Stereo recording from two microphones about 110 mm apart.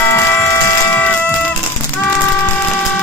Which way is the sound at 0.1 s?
25° left (ahead or behind).